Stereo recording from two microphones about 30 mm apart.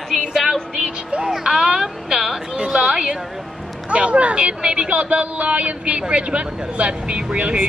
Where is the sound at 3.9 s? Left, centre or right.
Right.